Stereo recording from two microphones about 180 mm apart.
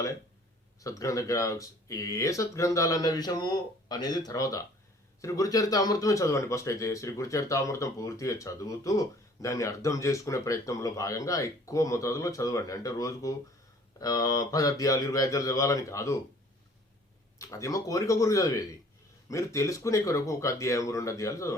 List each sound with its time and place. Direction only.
0.8 s a man's voice: 20° left (ahead or behind)
17.3 s a man's voice: 15° left (ahead or behind)